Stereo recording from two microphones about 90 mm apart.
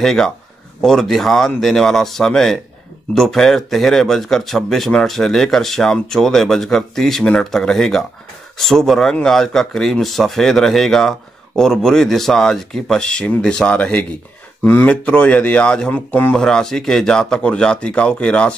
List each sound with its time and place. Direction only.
0.0 s speech: 5° left (ahead or behind)
16.4 s speech: 5° left (ahead or behind)